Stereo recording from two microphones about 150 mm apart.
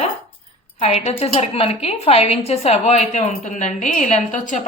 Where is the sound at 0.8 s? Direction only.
45° left (ahead or behind).